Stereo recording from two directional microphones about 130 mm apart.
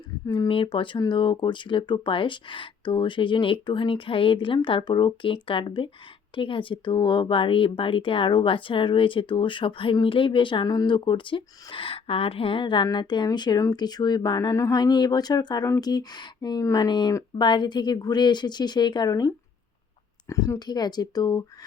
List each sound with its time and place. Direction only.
0.3 s speech: 35° left (ahead or behind)
20.3 s speech: 25° left (ahead or behind)